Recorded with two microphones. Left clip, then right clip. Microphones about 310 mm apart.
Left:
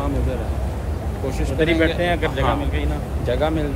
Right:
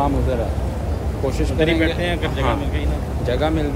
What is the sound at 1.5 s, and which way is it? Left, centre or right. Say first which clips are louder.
Speech: left 1 dB; centre.